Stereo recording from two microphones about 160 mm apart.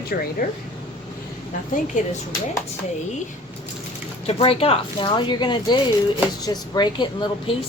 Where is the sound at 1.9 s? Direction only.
50° left (ahead or behind).